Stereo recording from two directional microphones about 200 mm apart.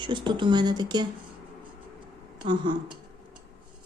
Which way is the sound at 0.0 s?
25° right (ahead or behind).